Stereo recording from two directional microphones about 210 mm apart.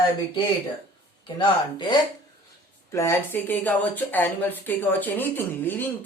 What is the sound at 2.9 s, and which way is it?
Speech, 10° left (ahead or behind).